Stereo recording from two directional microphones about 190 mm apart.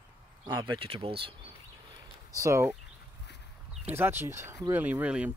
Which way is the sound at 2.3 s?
15° right (ahead or behind).